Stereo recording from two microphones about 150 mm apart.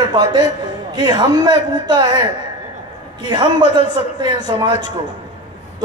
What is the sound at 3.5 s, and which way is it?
Speech, 30° right (ahead or behind).